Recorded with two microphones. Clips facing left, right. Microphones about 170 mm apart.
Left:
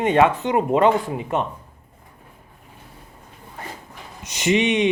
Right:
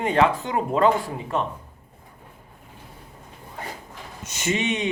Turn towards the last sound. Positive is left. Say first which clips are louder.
# left 6 dB
turn(degrees=20)  # may be behind; listen again after turning